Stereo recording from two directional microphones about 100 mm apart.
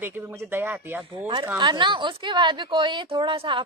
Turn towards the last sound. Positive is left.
turn(degrees=-55)  # may be behind; listen again after turning